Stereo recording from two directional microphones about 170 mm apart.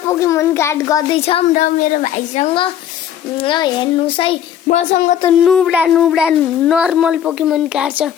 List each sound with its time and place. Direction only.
0.1 s a child's voice: 15° left (ahead or behind)
1.1 s a child's voice: 35° left (ahead or behind)
1.5 s a child's voice: 50° left (ahead or behind); by 4.8 s 30° left (ahead or behind)
4.8 s speech: 50° left (ahead or behind)
5.4 s a child's voice: centre (ahead or behind)